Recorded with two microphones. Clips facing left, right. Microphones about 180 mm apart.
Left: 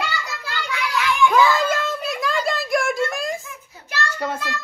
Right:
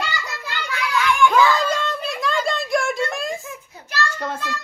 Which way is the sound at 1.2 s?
5° left (ahead or behind).